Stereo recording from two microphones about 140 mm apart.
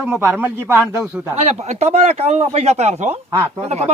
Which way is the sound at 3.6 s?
50° right (ahead or behind).